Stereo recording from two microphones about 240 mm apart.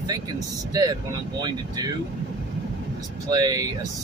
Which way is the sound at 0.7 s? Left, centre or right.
Centre.